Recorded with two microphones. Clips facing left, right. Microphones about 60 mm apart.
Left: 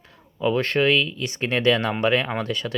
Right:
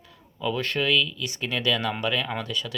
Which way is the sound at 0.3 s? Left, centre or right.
Left.